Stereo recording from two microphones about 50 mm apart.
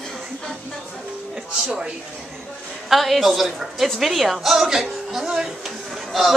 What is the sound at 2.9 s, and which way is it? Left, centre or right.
Speech, centre.